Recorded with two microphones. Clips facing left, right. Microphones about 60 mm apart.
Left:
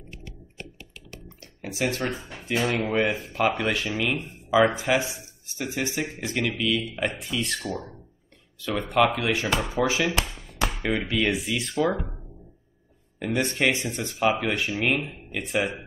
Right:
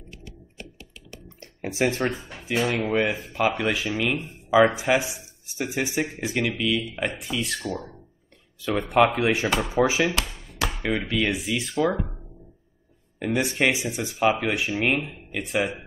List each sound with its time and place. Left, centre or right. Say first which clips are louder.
0.1 s computer keyboard: left 1 dB; left
1.4 s a sound: right 4 dB; right
2.1 s speech: right 1 dB; centre
10.7 s speech: right 1 dB; centre
13.2 s speech: right 1 dB; centre